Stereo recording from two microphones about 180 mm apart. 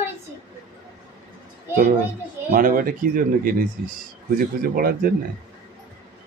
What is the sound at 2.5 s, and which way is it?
Speech, 50° right (ahead or behind).